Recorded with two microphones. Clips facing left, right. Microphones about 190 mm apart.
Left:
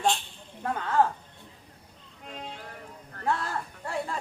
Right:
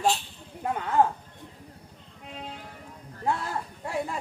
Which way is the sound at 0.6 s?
15° right (ahead or behind).